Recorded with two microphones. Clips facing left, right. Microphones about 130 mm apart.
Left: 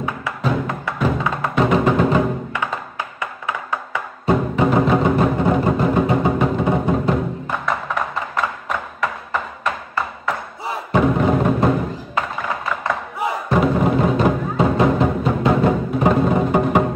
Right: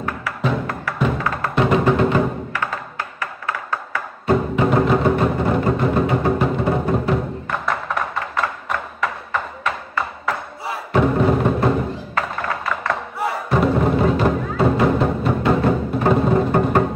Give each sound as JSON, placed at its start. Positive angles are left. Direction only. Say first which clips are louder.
{"t": 0.4, "sound": "music", "louder": "left 1 dB", "side_deg": 0}
{"t": 2.6, "sound": "tap", "louder": "left 1 dB", "side_deg": 20}
{"t": 4.3, "sound": "music", "louder": "even", "side_deg": 0}
{"t": 8.6, "sound": "a sound", "louder": "even", "side_deg": 0}
{"t": 11.0, "sound": "music", "louder": "even", "side_deg": 0}
{"t": 16.3, "sound": "music", "louder": "even", "side_deg": 10}